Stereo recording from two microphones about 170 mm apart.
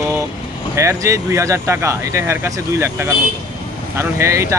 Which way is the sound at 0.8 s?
15° right (ahead or behind).